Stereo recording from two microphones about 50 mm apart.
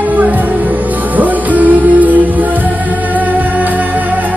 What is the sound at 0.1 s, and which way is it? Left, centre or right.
Music, right.